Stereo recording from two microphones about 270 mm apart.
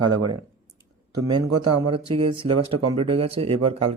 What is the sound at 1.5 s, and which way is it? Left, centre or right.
Speech, right.